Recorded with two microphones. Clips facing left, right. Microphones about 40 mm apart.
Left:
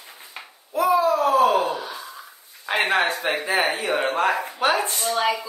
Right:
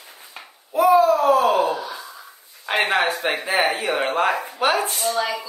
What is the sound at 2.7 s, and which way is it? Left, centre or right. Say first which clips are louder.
Speech: right 1 dB; right.